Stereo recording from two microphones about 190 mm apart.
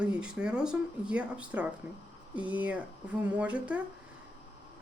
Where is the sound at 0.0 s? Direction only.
5° right (ahead or behind).